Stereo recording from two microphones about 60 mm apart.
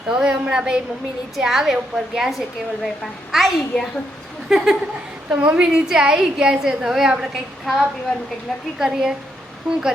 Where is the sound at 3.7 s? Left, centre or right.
Centre.